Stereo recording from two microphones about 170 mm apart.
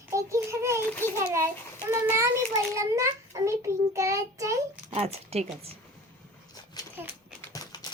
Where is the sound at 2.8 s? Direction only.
15° right (ahead or behind).